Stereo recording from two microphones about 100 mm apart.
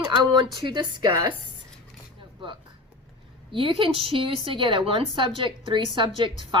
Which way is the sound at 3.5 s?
60° right (ahead or behind).